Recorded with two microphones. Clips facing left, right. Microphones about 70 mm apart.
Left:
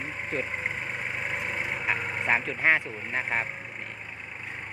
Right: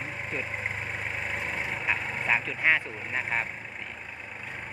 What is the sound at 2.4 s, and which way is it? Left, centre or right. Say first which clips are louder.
Speech: left 1 dB; left.